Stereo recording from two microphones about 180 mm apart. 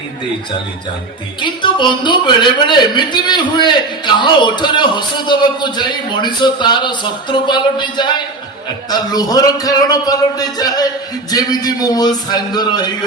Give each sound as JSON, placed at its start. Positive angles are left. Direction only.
{"t": 1.4, "sound": "a man's voice", "side_deg": 25}